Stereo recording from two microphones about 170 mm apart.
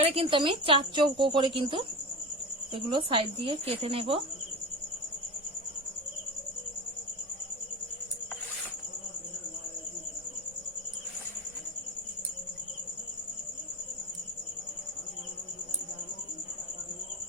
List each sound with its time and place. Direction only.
0.0 s speech: 35° right (ahead or behind)